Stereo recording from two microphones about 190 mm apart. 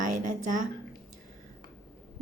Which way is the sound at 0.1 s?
45° right (ahead or behind).